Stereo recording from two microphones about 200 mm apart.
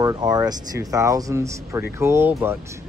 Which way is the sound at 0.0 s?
20° right (ahead or behind).